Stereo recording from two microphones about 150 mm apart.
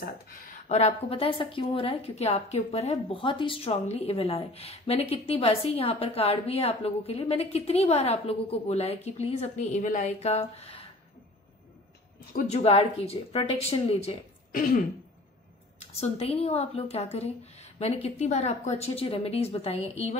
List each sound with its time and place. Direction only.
0.0 s speech: 65° left (ahead or behind)
0.7 s a woman's voice: 45° left (ahead or behind)
12.4 s a woman's voice: 45° left (ahead or behind)
14.5 s throat clearing: 70° left (ahead or behind)
15.9 s a woman's voice: 45° left (ahead or behind)